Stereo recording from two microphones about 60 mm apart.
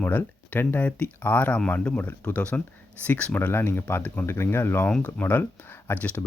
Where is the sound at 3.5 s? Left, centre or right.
Left.